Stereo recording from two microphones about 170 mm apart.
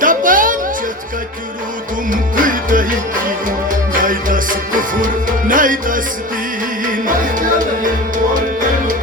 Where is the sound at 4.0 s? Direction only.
55° right (ahead or behind).